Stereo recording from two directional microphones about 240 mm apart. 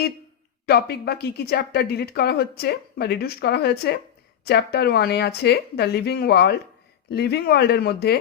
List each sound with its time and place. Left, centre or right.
0.6 s speech: left